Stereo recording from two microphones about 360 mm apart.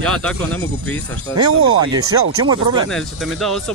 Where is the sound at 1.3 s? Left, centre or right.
Right.